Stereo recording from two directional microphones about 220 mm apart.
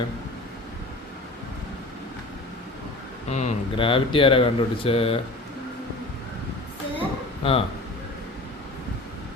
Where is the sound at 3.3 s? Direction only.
25° left (ahead or behind).